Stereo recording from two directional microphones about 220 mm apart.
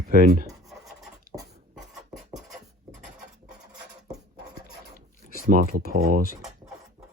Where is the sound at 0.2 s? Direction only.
40° right (ahead or behind).